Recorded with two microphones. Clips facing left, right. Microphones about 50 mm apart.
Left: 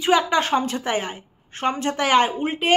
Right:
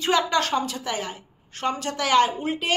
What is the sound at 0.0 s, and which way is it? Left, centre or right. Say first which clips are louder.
A woman's voice: left 3 dB; centre.